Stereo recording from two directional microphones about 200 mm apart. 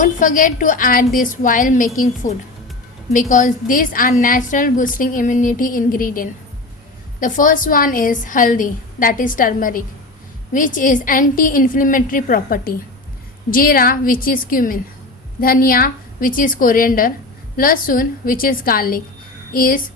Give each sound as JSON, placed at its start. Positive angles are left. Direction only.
{"t": 0.0, "sound": "a woman's voice", "side_deg": 40}